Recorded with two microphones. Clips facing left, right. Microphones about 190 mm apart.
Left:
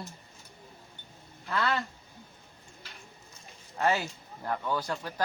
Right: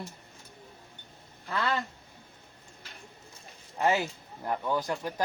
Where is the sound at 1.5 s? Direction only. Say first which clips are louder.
Left 1 dB; 20° right (ahead or behind).